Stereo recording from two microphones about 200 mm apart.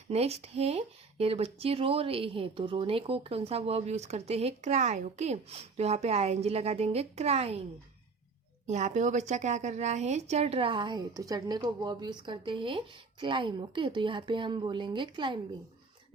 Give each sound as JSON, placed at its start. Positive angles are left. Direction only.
{"t": 0.1, "sound": "speech", "side_deg": -30}
{"t": 8.6, "sound": "a woman's voice", "side_deg": -35}